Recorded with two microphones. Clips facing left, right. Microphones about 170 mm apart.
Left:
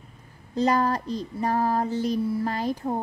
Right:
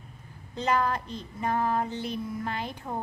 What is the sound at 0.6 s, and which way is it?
Speech, 35° left (ahead or behind).